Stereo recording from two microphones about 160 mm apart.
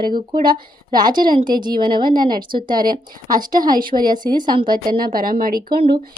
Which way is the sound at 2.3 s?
60° right (ahead or behind).